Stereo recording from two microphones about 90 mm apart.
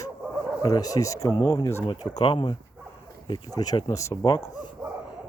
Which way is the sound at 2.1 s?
60° left (ahead or behind).